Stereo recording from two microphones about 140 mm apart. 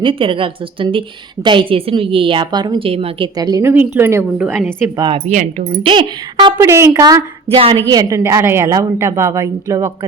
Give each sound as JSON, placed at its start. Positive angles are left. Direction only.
{"t": 0.0, "sound": "a woman's voice", "side_deg": -35}
{"t": 3.3, "sound": "a woman's voice", "side_deg": -25}
{"t": 5.1, "sound": "speech", "side_deg": -50}
{"t": 5.5, "sound": "a woman's voice", "side_deg": -40}
{"t": 6.7, "sound": "a woman's voice", "side_deg": -20}
{"t": 7.4, "sound": "a woman's voice", "side_deg": -45}
{"t": 7.9, "sound": "a woman's voice", "side_deg": -25}